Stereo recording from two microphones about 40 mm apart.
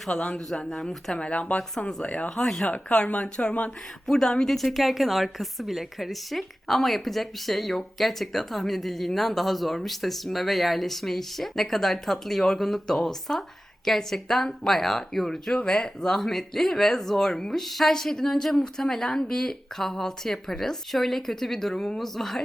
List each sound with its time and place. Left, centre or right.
0.1 s speech: left
0.3 s speech: centre
1.1 s speech: left
2.3 s speech: centre
2.6 s speech: left
4.0 s a woman's voice: centre
15.5 s speech: left; by 22.4 s centre